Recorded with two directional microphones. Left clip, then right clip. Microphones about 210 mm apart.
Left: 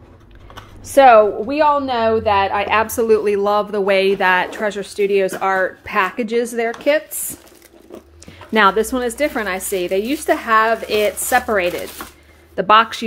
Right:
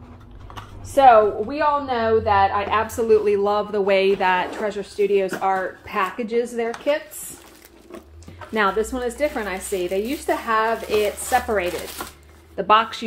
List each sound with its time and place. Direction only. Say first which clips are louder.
0.9 s a woman's voice: left 4 dB; 55° left (ahead or behind)
8.5 s speech: left 7 dB; 55° left (ahead or behind)
12.5 s a woman's voice: left 5 dB; 40° left (ahead or behind)